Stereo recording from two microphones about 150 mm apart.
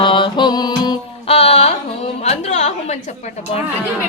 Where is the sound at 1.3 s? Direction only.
40° left (ahead or behind).